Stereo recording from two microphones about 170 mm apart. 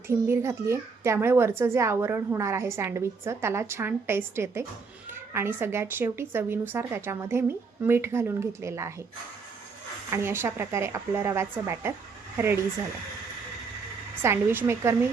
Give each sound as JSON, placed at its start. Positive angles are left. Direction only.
{"t": 0.3, "sound": "a child's voice", "side_deg": -15}
{"t": 10.1, "sound": "a child's voice", "side_deg": -15}
{"t": 14.2, "sound": "a child's voice", "side_deg": -10}